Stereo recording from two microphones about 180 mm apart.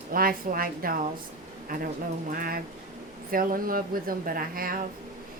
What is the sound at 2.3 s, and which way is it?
A woman's voice, 55° right (ahead or behind).